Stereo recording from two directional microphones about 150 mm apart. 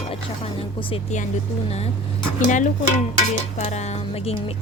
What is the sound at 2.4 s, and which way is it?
A woman's voice, 60° left (ahead or behind).